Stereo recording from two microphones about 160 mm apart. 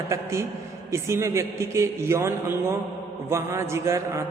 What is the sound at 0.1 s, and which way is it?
A man's voice, 15° right (ahead or behind).